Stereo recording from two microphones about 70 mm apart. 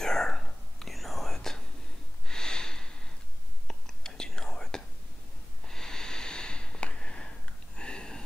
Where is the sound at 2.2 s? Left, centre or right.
Centre.